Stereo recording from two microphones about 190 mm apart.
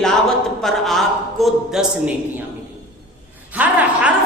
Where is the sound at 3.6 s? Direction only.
10° right (ahead or behind).